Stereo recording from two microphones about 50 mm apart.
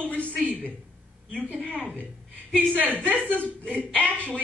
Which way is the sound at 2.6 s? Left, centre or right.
Right.